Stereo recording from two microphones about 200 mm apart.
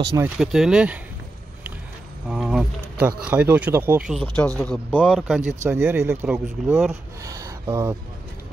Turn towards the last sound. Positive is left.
turn(degrees=-15)  # may be behind; listen again after turning